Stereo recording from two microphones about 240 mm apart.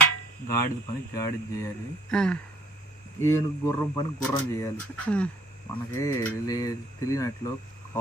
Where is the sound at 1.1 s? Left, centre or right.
Centre.